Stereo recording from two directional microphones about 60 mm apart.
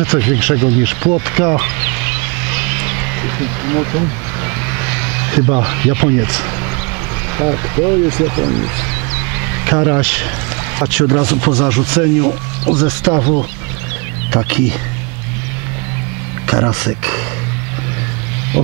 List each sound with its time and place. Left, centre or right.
0.0 s speech: centre
4.7 s speech: centre
16.4 s speech: centre